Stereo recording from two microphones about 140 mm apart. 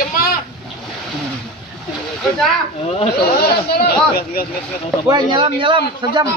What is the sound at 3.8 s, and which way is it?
Speech, 90° left.